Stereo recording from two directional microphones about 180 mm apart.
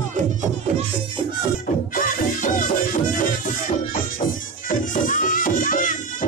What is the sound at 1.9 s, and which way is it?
Music, 45° left (ahead or behind).